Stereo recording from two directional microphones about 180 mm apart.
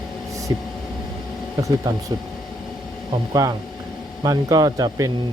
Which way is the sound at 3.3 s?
20° right (ahead or behind).